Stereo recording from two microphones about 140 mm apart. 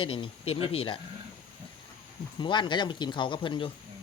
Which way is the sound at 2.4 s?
35° left (ahead or behind).